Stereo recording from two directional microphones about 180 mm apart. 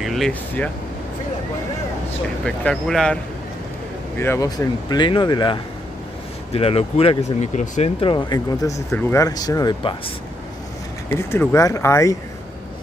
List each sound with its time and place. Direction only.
0.0 s speech: centre (ahead or behind)
2.4 s speech: 5° left (ahead or behind)
4.2 s speech: 15° left (ahead or behind)
11.1 s speech: 15° left (ahead or behind)